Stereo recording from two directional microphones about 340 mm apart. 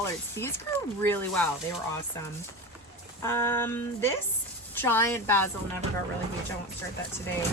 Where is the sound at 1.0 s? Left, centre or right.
Centre.